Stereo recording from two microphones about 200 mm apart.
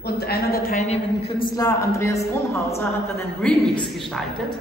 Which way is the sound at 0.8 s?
30° left (ahead or behind).